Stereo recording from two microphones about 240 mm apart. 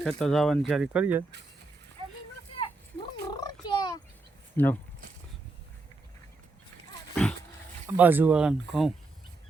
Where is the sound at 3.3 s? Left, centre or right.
Centre.